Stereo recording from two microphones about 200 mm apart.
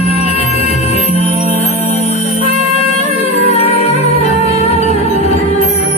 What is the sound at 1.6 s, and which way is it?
Music, 30° left (ahead or behind).